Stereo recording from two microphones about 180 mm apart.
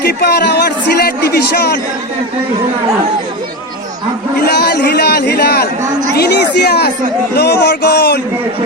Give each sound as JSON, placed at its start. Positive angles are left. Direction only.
{"t": 0.0, "sound": "speech", "side_deg": 65}
{"t": 4.4, "sound": "speech", "side_deg": 60}